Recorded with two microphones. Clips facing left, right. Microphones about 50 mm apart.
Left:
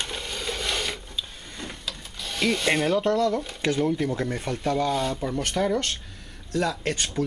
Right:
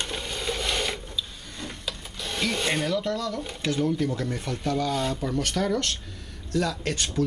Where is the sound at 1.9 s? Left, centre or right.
Centre.